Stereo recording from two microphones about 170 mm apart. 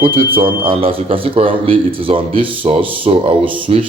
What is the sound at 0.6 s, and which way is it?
A man's voice, 35° right (ahead or behind).